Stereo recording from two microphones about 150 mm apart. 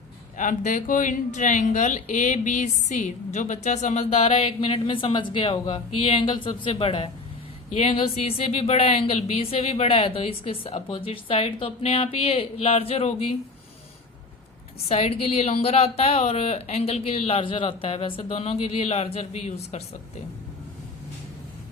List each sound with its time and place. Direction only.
0.3 s speech: 60° left (ahead or behind); by 13.2 s 40° left (ahead or behind)
14.8 s speech: 45° left (ahead or behind)